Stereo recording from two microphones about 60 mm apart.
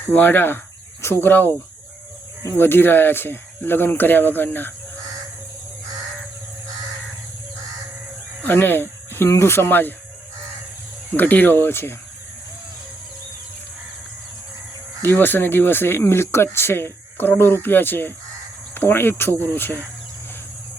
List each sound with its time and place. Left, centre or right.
0.1 s speech: left
2.6 s speech: left
8.4 s speech: left
11.2 s speech: left
15.0 s speech: left